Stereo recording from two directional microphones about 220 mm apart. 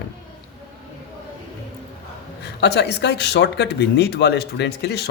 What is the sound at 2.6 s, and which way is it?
A man's voice, 50° left (ahead or behind).